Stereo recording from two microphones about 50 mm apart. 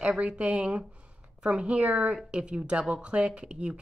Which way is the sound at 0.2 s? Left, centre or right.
Right.